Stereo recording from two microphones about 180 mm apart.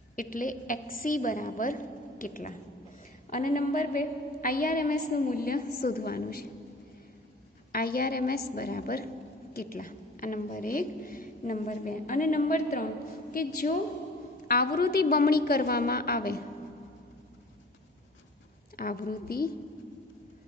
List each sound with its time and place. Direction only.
0.1 s a woman's voice: 50° left (ahead or behind)
7.7 s a woman's voice: 55° left (ahead or behind)
18.8 s a woman's voice: 55° left (ahead or behind)